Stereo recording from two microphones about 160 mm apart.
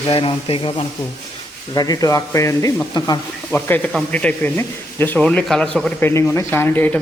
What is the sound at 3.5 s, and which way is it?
A man's voice, 10° left (ahead or behind).